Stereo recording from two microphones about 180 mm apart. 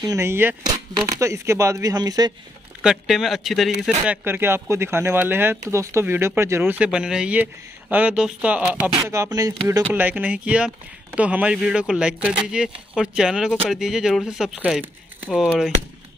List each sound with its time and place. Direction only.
0.0 s speech: 15° right (ahead or behind)
2.8 s speech: centre (ahead or behind)